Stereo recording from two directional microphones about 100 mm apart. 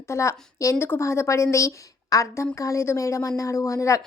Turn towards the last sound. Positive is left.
turn(degrees=30)  # may be behind; listen again after turning